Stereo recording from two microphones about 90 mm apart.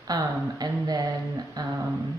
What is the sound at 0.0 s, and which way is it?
Speech, 45° right (ahead or behind).